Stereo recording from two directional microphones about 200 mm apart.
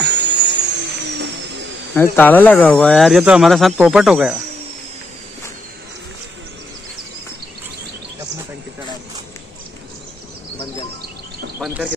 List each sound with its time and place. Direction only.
0.0 s a sound: 60° right (ahead or behind)
2.0 s speech: 10° left (ahead or behind)
11.6 s bird: 5° right (ahead or behind)